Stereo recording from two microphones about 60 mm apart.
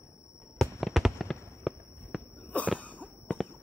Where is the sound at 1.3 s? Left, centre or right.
Centre.